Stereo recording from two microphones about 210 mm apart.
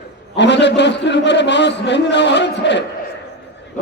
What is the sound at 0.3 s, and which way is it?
A man's voice, 55° left (ahead or behind).